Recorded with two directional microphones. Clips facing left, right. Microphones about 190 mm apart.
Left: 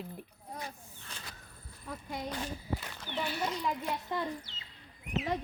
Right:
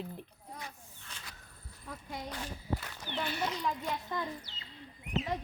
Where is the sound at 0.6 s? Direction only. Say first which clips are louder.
Left 4 dB; 35° left (ahead or behind).